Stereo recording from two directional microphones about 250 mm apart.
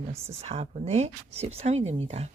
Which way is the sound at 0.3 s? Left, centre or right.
Right.